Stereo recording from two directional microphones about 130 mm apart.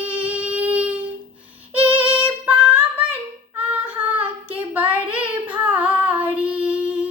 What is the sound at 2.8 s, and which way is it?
Child singing, 15° right (ahead or behind).